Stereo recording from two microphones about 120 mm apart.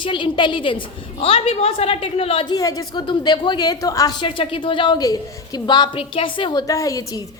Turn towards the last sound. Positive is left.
turn(degrees=30)  # may be behind; listen again after turning